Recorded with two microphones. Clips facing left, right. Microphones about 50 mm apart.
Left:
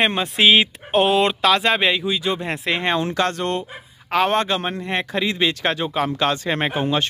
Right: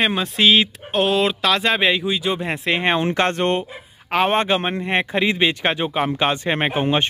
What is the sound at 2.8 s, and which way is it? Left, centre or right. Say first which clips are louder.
Speech: right 2 dB; right.